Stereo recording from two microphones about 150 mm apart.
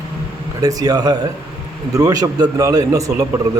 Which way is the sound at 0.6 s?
25° right (ahead or behind).